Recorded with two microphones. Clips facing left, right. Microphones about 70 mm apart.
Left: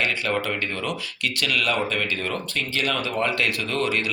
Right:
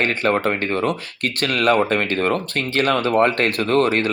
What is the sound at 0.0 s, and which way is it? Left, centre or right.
Speech, right.